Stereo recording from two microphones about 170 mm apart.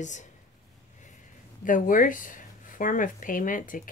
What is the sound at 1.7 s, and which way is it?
Speech, 50° left (ahead or behind).